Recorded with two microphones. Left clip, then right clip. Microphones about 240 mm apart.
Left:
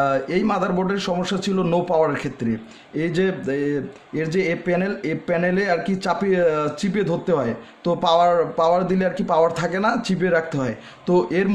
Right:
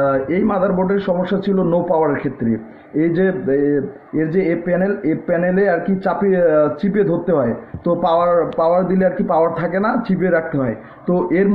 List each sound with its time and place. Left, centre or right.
0.0 s speech: left